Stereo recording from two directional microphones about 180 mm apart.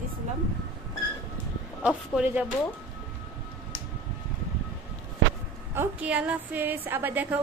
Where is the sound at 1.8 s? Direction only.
5° right (ahead or behind).